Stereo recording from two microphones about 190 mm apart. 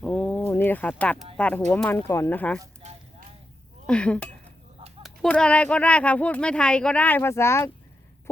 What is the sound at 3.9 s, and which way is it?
A woman's voice, 5° left (ahead or behind).